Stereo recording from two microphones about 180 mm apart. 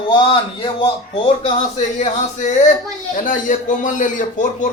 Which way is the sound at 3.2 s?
45° left (ahead or behind).